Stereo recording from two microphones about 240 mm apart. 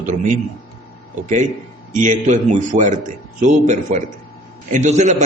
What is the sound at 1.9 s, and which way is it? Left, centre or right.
A man's voice, right.